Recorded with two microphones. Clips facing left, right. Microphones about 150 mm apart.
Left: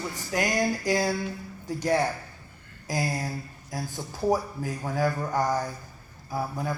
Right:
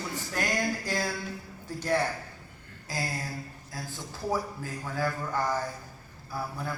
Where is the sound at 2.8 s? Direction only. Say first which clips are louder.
Left 5 dB; 15° left (ahead or behind).